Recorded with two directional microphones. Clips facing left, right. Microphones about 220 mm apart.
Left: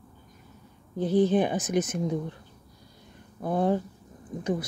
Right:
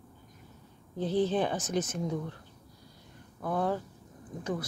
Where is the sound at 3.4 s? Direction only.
20° left (ahead or behind).